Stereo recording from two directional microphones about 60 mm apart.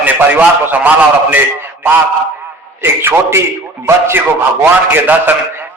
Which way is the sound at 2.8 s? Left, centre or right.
Right.